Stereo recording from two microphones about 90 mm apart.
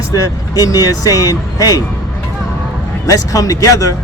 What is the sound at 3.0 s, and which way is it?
Speech, 40° left (ahead or behind).